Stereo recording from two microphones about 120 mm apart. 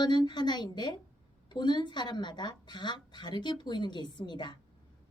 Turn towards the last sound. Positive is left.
turn(degrees=35)  # may be behind; listen again after turning